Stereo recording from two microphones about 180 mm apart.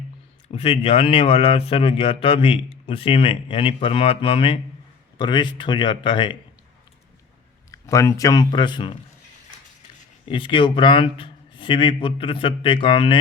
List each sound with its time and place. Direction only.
0.5 s a man's voice: 35° left (ahead or behind)
7.7 s a man's voice: 15° left (ahead or behind)
10.2 s a man's voice: 25° left (ahead or behind)